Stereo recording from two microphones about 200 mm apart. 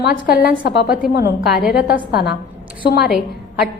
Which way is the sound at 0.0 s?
50° left (ahead or behind).